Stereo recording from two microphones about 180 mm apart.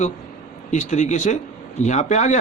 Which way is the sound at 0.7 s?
40° left (ahead or behind).